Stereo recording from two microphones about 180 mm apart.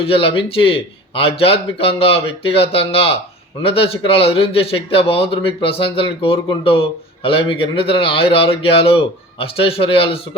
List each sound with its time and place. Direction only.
0.0 s a man's voice: 30° left (ahead or behind)